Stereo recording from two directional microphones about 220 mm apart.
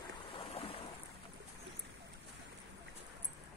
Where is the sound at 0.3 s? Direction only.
25° left (ahead or behind).